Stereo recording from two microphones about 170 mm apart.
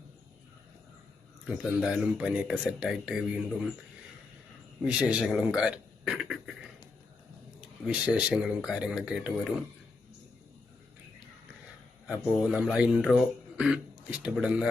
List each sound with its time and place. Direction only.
1.5 s speech: 5° right (ahead or behind)
4.8 s speech: 5° right (ahead or behind)
7.6 s speech: 5° right (ahead or behind)
12.4 s a man's voice: 5° right (ahead or behind)